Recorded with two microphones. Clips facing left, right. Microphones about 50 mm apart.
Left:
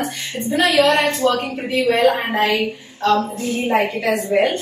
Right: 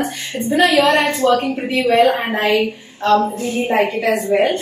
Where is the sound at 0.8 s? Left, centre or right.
Right.